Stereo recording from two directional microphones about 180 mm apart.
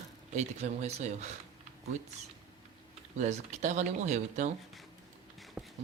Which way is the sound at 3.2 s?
40° right (ahead or behind).